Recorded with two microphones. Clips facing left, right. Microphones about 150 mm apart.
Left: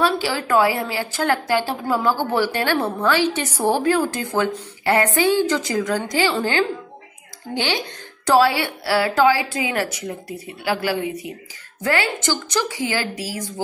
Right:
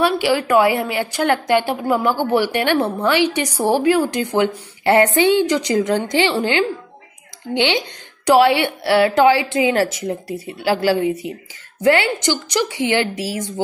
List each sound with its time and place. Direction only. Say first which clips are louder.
0.0 s a woman's voice: right 4 dB; 15° right (ahead or behind)